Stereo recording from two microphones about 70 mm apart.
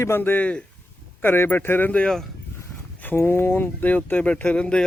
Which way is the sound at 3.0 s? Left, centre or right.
Left.